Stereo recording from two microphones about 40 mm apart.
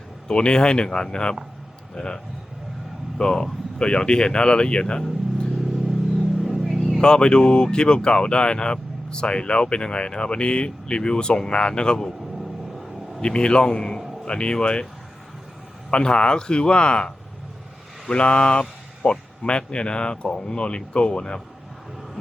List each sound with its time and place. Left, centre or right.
0.3 s speech: left
6.4 s music: centre
7.0 s speech: left
13.2 s speech: left
15.9 s speech: left
18.1 s speech: left